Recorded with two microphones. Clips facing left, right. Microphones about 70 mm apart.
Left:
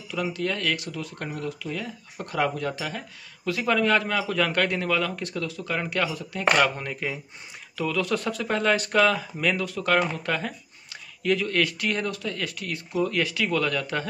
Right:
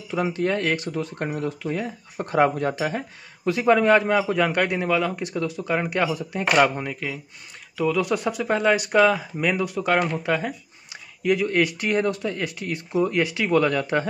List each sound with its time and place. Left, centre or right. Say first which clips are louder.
0.1 s speech: right 5 dB; right
6.9 s a man's voice: right 1 dB; centre
7.7 s speech: right 4 dB; centre